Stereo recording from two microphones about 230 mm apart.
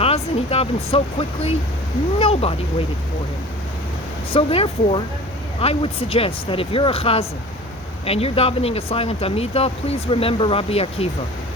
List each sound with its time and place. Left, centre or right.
0.0 s speech: left
4.3 s speech: left